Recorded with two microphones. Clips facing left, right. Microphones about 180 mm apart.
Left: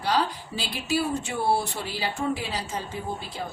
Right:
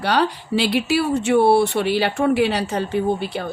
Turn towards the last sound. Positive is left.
turn(degrees=-75)  # may be behind; listen again after turning